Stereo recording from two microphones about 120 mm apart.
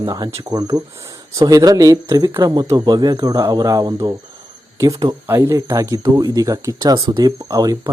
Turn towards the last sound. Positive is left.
turn(degrees=-35)  # may be behind; listen again after turning